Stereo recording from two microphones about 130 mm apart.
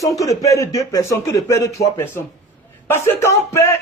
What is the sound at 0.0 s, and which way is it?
Speech, 25° left (ahead or behind).